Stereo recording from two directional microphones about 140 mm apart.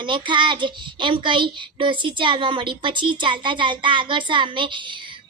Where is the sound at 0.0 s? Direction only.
35° right (ahead or behind).